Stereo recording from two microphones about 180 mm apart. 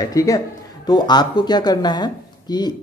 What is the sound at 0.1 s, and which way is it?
Speech, 20° left (ahead or behind).